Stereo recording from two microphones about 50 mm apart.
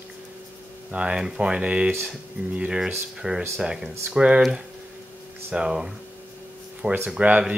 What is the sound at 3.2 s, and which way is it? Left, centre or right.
Speech, centre.